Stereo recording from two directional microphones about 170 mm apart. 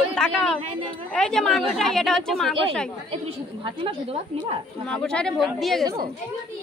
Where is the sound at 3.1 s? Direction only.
30° right (ahead or behind).